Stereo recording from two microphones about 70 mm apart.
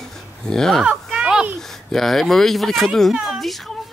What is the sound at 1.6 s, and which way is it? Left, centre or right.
Speech, centre.